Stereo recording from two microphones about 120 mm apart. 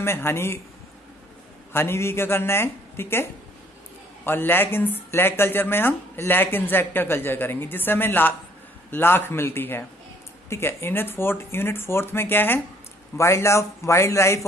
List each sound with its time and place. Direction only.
0.0 s speech: 20° left (ahead or behind)
1.7 s speech: 20° left (ahead or behind)